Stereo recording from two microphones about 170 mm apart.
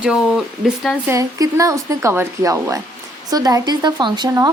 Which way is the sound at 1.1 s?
20° right (ahead or behind).